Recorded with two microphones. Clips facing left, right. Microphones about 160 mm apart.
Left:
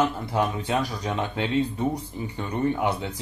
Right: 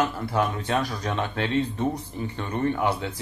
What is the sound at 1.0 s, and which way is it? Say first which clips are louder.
Speech: even; 15° left (ahead or behind).